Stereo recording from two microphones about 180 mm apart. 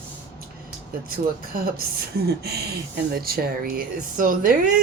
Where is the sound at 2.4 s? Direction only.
65° right (ahead or behind).